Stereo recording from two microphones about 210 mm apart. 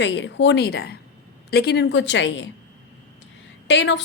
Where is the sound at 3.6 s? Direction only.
55° left (ahead or behind).